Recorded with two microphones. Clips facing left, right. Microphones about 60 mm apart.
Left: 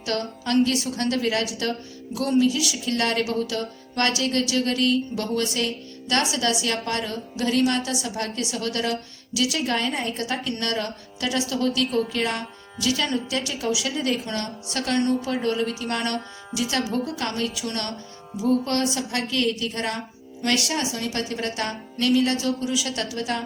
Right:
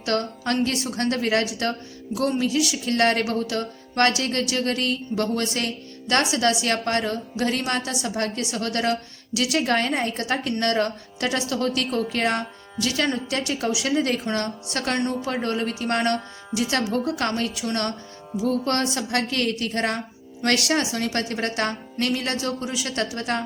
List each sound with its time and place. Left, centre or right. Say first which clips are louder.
0.0 s a woman's voice: right 3 dB; right
20.4 s a woman's voice: right 2 dB; right